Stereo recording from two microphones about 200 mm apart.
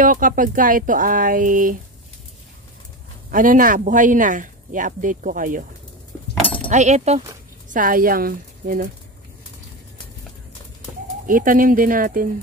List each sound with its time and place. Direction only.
0.0 s speech: 40° right (ahead or behind)
3.3 s speech: 40° right (ahead or behind)
6.4 s keys jangling: 10° left (ahead or behind)
6.7 s speech: 35° right (ahead or behind)
11.2 s speech: 45° right (ahead or behind)